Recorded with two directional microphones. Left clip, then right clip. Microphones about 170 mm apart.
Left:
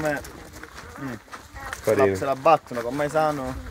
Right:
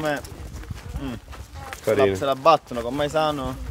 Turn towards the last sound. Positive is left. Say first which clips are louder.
# even
turn(degrees=-15)  # may be behind; listen again after turning